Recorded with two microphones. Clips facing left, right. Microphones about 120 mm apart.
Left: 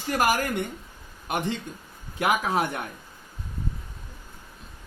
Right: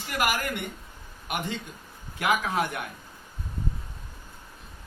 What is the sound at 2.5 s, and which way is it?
Speech, 35° left (ahead or behind).